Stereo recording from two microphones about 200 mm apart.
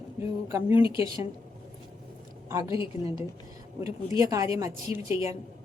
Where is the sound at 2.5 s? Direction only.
15° right (ahead or behind).